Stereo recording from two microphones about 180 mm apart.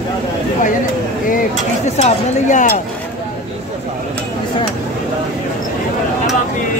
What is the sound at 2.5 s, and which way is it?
Speech, 45° left (ahead or behind).